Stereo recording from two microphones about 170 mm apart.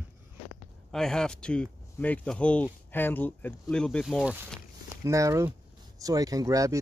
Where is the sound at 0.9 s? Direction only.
5° left (ahead or behind).